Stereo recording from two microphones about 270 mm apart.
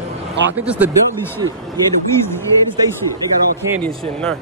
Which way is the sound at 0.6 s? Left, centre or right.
Centre.